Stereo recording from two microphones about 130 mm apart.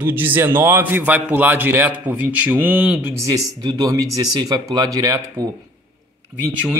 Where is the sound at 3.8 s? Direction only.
30° right (ahead or behind).